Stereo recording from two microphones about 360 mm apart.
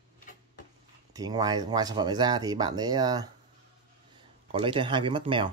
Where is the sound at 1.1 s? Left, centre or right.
Centre.